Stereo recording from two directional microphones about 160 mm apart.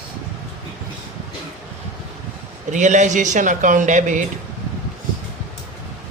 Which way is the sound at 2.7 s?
50° right (ahead or behind).